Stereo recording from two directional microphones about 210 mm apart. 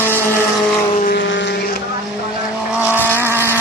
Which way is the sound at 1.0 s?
50° left (ahead or behind).